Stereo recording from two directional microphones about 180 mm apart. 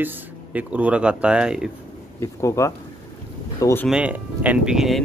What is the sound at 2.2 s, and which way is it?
Speech, 15° left (ahead or behind).